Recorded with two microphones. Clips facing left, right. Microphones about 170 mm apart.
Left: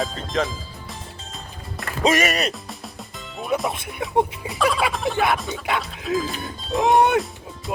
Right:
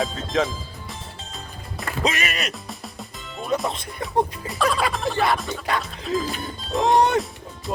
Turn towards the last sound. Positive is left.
turn(degrees=0)  # may be behind; listen again after turning